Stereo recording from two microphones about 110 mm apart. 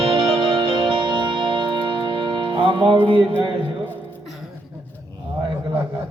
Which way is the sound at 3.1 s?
50° right (ahead or behind).